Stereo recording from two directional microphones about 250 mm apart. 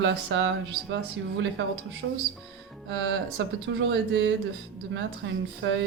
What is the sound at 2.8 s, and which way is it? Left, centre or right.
Speech, right.